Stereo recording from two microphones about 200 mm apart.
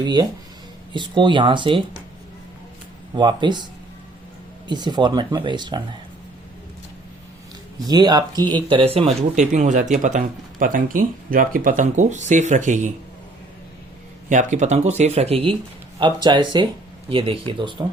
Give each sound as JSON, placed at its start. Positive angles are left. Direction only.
{"t": 0.0, "sound": "speech", "side_deg": -20}
{"t": 3.2, "sound": "speech", "side_deg": -20}
{"t": 4.7, "sound": "speech", "side_deg": -20}
{"t": 7.9, "sound": "speech", "side_deg": -20}
{"t": 14.3, "sound": "speech", "side_deg": -35}